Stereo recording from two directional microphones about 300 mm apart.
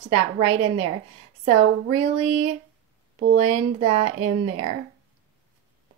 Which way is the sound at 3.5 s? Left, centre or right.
Right.